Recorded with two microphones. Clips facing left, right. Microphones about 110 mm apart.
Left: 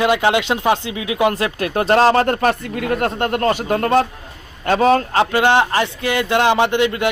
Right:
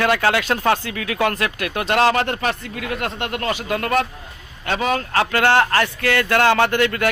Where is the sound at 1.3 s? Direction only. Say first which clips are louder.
Left 4 dB; 30° left (ahead or behind).